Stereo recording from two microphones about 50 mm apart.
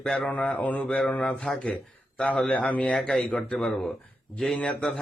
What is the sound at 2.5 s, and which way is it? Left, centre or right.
Speech, left.